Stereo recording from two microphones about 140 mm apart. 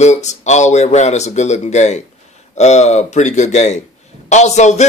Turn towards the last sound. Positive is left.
turn(degrees=55)  # may be behind; listen again after turning